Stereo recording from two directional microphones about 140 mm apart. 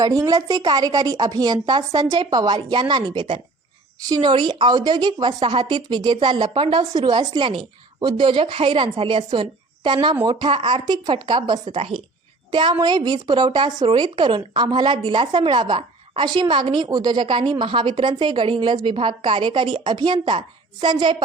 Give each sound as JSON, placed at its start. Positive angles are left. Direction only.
{"t": 0.0, "sound": "a woman's voice", "side_deg": -25}
{"t": 11.6, "sound": "a woman's voice", "side_deg": -45}